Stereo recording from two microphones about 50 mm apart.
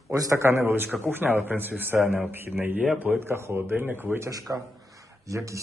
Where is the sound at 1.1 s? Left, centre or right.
Right.